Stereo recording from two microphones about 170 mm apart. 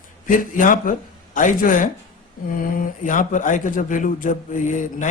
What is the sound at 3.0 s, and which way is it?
Speech, 50° left (ahead or behind).